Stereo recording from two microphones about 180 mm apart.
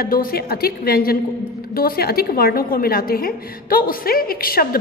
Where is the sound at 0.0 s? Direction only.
55° left (ahead or behind).